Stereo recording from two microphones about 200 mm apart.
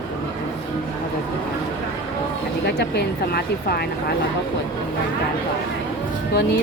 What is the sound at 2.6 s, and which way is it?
Speech, 50° left (ahead or behind).